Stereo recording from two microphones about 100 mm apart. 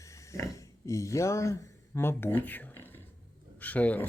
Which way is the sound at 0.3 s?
30° left (ahead or behind).